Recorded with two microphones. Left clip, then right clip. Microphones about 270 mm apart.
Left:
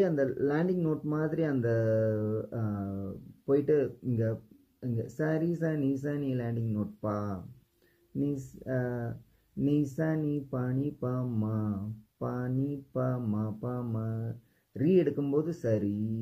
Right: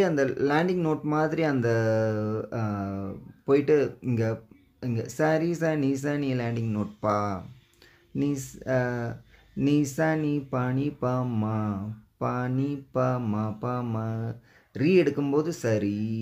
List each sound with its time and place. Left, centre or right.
0.0 s speech: centre